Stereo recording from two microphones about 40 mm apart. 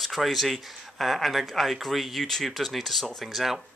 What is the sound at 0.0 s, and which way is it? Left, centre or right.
Speech, centre.